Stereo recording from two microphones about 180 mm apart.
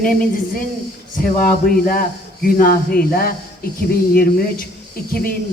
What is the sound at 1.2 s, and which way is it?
A man's voice, 55° left (ahead or behind).